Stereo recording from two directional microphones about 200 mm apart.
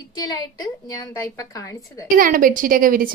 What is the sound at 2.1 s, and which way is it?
Speech, 45° right (ahead or behind).